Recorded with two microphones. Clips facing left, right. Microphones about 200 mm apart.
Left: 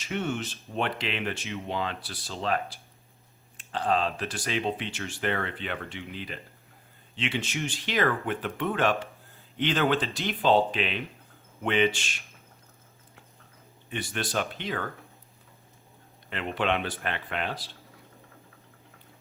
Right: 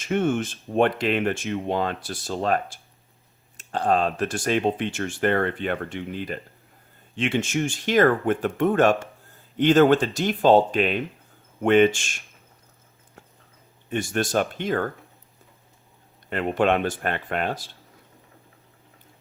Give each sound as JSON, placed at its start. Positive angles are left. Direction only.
{"t": 0.0, "sound": "speech", "side_deg": -50}
{"t": 13.9, "sound": "speech", "side_deg": -45}
{"t": 16.3, "sound": "speech", "side_deg": -45}